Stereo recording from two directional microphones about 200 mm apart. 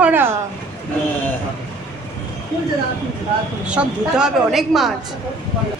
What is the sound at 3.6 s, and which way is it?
A woman's voice, 5° right (ahead or behind).